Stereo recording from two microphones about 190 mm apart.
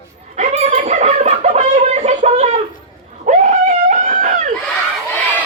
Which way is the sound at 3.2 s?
40° right (ahead or behind).